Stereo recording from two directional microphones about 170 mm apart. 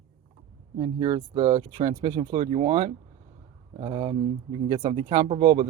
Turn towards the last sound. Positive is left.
turn(degrees=-30)  # may be behind; listen again after turning